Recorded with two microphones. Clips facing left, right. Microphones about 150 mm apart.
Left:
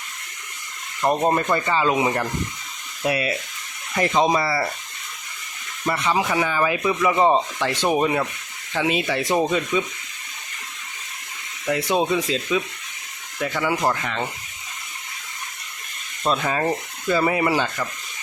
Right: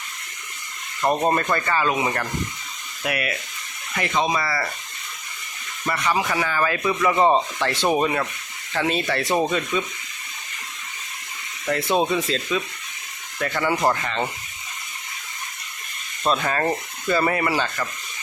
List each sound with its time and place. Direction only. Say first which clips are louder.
1.0 s speech: left 1 dB; 5° left (ahead or behind); by 3.3 s 25° left (ahead or behind)
3.9 s speech: left 4 dB; 40° left (ahead or behind)
5.8 s speech: left 1 dB; 20° left (ahead or behind)
11.7 s speech: even; 10° left (ahead or behind)
16.2 s speech: even; 5° left (ahead or behind)